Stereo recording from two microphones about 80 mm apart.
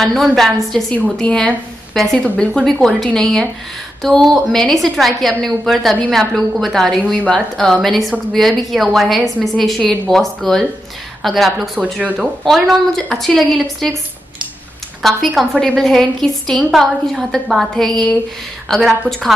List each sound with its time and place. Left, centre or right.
0.0 s a woman's voice: centre
11.8 s speech: centre
12.4 s a woman's voice: centre
15.0 s a woman's voice: centre